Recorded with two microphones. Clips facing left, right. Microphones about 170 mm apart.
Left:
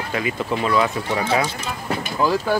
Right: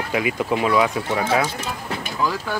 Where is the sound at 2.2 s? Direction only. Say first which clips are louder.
Left 5 dB; 30° left (ahead or behind).